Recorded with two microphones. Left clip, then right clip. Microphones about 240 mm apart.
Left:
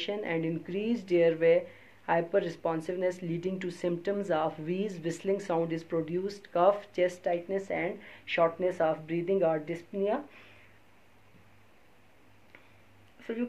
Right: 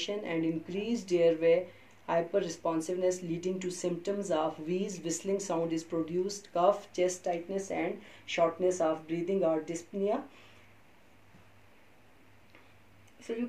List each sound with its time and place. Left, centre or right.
0.0 s speech: left